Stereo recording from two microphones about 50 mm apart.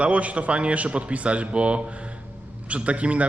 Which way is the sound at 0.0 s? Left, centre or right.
Right.